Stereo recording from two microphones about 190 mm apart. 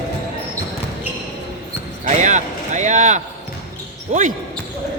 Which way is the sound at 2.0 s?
40° right (ahead or behind).